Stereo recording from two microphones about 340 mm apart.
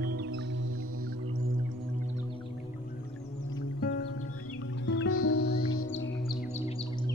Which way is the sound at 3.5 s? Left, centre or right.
Left.